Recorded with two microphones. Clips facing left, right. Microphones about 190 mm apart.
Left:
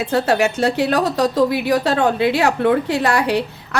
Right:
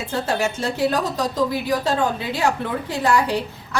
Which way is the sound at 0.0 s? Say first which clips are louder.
Left 6 dB; 70° left (ahead or behind).